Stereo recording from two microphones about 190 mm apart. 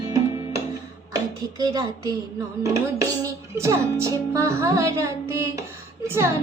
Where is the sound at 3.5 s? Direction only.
15° right (ahead or behind).